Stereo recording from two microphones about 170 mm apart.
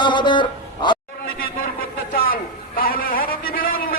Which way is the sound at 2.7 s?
55° left (ahead or behind).